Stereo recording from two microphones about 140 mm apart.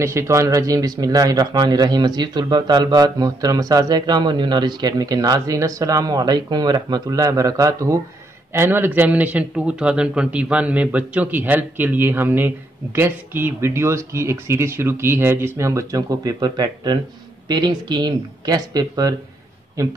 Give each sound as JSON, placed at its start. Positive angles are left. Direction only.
{"t": 0.0, "sound": "a man's voice", "side_deg": -20}